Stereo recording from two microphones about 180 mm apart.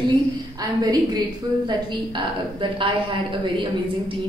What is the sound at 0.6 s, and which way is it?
A woman's voice, 20° right (ahead or behind).